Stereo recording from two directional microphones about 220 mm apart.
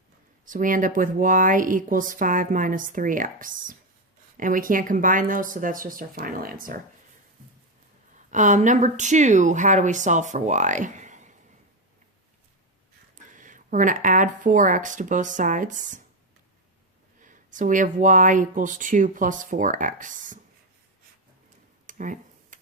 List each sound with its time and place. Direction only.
0.4 s speech: 35° right (ahead or behind)
8.3 s speech: 35° right (ahead or behind)
13.1 s speech: 35° right (ahead or behind)
17.2 s speech: 35° right (ahead or behind)
21.8 s tick-tock: 35° right (ahead or behind)